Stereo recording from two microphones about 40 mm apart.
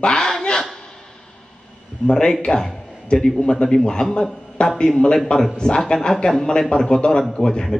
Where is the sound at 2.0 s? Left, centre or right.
Left.